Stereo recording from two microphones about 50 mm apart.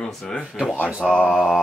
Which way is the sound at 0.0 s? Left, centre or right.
Left.